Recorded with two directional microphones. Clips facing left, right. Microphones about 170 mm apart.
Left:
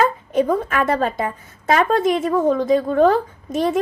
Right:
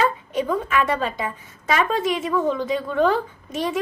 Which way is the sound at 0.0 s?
45° left (ahead or behind).